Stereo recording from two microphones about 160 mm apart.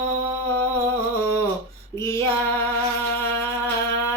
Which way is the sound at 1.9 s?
15° left (ahead or behind).